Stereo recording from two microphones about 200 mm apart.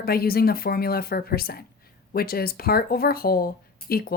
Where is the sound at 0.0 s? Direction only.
50° left (ahead or behind).